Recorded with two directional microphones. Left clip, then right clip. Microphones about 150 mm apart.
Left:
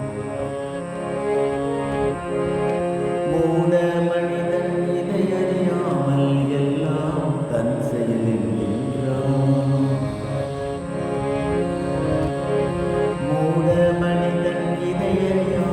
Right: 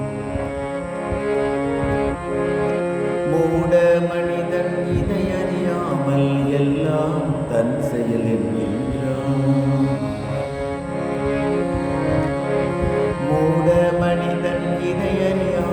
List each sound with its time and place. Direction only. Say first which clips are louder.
3.3 s music: right 3 dB; 35° right (ahead or behind)
13.7 s music: right 1 dB; 30° right (ahead or behind)